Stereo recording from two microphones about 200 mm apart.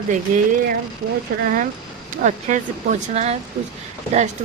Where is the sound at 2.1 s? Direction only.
40° right (ahead or behind).